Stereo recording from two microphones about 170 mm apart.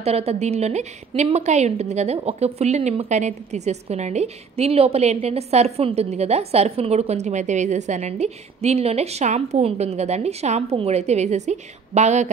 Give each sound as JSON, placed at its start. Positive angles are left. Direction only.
{"t": 0.0, "sound": "a woman's voice", "side_deg": -40}